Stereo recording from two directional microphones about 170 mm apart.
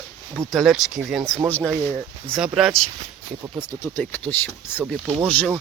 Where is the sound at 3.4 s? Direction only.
20° right (ahead or behind).